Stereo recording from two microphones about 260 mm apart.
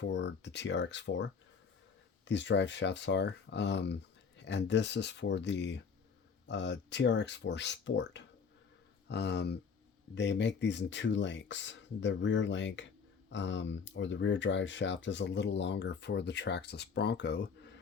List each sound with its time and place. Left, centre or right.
0.0 s speech: left